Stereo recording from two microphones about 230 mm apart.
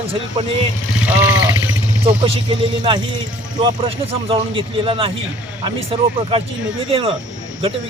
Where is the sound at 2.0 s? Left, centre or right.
Right.